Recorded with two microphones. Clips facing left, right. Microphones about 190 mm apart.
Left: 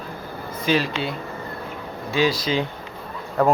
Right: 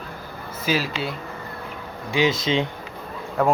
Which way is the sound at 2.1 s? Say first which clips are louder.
Even; 20° right (ahead or behind).